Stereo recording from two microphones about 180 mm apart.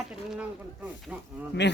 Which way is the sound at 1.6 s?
75° left (ahead or behind).